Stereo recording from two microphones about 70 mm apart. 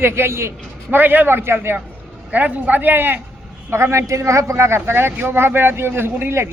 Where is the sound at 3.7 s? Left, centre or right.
Right.